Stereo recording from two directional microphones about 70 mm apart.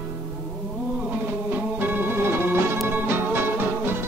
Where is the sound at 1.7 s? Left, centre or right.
Right.